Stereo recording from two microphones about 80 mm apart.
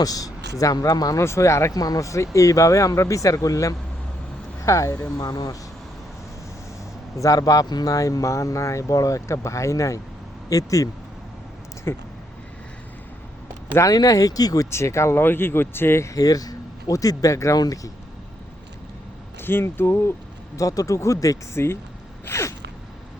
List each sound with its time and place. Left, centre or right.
0.0 s speech: left
1.2 s speech: left
1.7 s speech: left
5.1 s speech: left
7.2 s speech: left
11.9 s speech: left
13.8 s speech: left
14.7 s speech: left
16.1 s speech: left
19.4 s speech: left
20.6 s speech: left
22.3 s gasp: left